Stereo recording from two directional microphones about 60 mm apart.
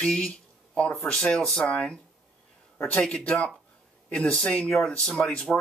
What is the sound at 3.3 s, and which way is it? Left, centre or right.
Speech, left.